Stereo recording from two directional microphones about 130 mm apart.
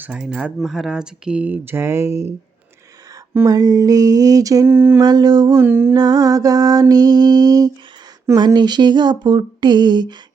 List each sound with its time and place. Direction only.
0.0 s speech: 5° right (ahead or behind)
3.3 s mantra: 25° right (ahead or behind)
4.9 s a sound: 30° right (ahead or behind)
5.6 s speech: 15° right (ahead or behind)
6.0 s mantra: 30° right (ahead or behind)
8.4 s a sound: 35° right (ahead or behind)